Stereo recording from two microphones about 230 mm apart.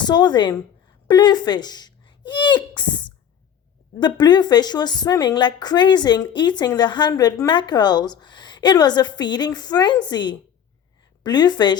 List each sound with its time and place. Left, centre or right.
0.0 s a woman's voice: centre
4.0 s a woman's voice: centre